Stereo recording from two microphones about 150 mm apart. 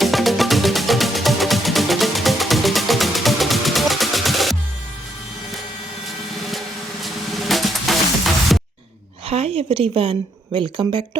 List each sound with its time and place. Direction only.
0.0 s music: centre (ahead or behind)
7.0 s drum: centre (ahead or behind)
8.5 s music: centre (ahead or behind)
9.2 s a woman's voice: 40° right (ahead or behind)